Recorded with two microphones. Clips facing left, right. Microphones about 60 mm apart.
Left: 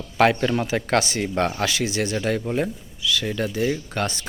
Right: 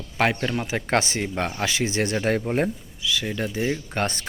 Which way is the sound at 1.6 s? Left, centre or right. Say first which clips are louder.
Left 1 dB; right.